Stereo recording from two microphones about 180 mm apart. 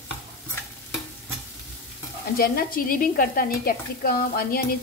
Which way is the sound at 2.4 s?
55° left (ahead or behind).